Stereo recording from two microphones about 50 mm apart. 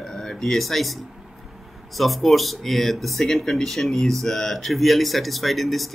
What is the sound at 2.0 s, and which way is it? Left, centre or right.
Speech, centre.